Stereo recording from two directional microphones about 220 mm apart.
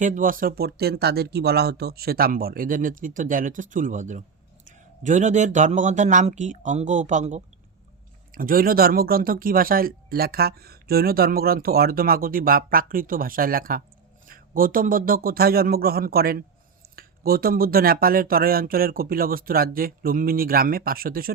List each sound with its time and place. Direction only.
0.0 s speech: 35° right (ahead or behind)